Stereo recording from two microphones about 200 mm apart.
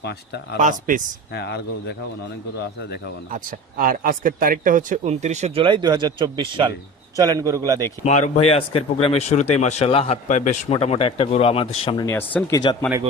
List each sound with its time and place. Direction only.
0.6 s speech: 40° right (ahead or behind)
1.3 s speech: 55° left (ahead or behind)
3.3 s a man's voice: 45° right (ahead or behind); by 7.9 s 15° right (ahead or behind)
8.0 s speech: 35° left (ahead or behind)
12.0 s speech: 10° left (ahead or behind)